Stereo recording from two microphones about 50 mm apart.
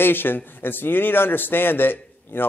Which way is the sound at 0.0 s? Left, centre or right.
Left.